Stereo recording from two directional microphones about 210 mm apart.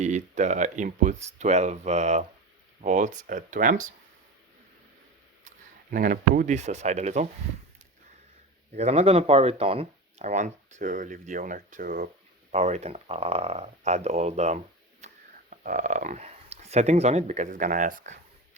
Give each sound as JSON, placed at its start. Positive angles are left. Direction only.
{"t": 0.0, "sound": "speech", "side_deg": -35}
{"t": 5.9, "sound": "speech", "side_deg": -40}
{"t": 8.7, "sound": "speech", "side_deg": -30}